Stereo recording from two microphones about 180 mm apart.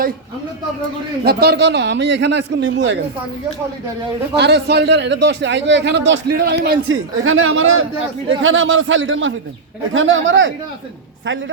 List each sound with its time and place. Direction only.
1.2 s a man's voice: 60° right (ahead or behind); by 3.0 s 85° right
4.4 s a man's voice: 65° right (ahead or behind); by 10.5 s 90° right